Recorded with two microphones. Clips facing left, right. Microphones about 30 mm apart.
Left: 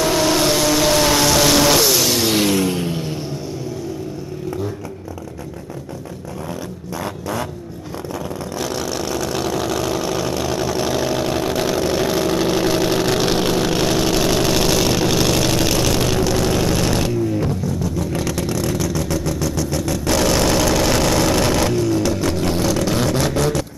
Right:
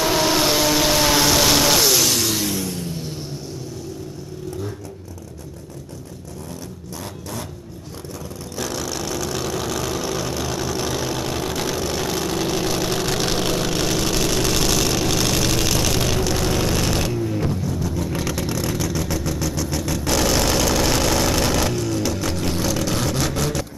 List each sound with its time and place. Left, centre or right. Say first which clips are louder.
0.0 s vehicle: left 2 dB; centre
2.4 s vehicle: left 7 dB; left
8.5 s vehicle: left 2 dB; centre